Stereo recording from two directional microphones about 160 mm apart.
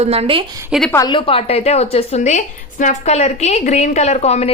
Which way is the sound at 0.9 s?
25° left (ahead or behind).